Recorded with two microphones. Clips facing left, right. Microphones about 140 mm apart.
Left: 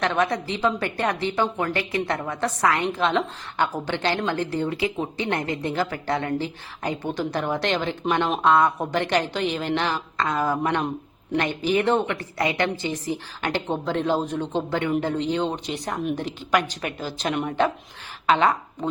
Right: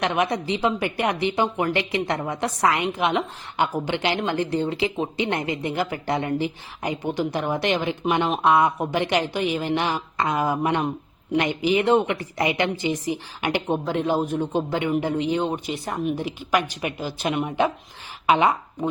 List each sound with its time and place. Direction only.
0.0 s a woman's voice: 15° right (ahead or behind)